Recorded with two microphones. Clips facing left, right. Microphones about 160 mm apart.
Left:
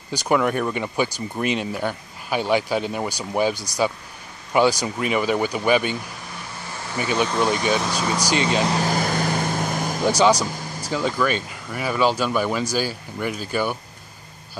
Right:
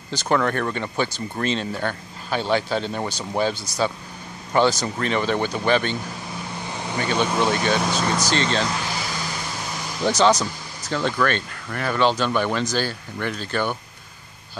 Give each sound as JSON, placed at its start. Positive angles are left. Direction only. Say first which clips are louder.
{"t": 0.1, "sound": "speech", "louder": "left 1 dB", "side_deg": 10}
{"t": 7.0, "sound": "speech", "louder": "even", "side_deg": 10}
{"t": 8.8, "sound": "vehicle", "louder": "left 7 dB", "side_deg": 50}
{"t": 10.0, "sound": "speech", "louder": "even", "side_deg": 10}